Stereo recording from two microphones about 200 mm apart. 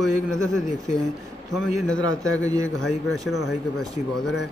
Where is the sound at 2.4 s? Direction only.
15° right (ahead or behind).